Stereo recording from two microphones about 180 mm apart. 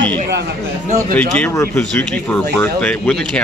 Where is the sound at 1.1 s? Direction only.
10° left (ahead or behind).